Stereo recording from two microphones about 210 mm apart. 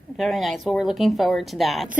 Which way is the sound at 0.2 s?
Centre (ahead or behind).